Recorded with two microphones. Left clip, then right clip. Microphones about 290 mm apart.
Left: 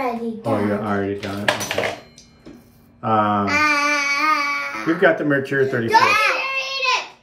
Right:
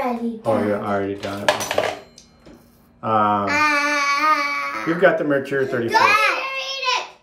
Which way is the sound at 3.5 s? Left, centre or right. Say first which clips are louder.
Left 1 dB; centre.